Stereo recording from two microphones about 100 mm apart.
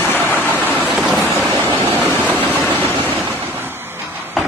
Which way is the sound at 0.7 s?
15° right (ahead or behind).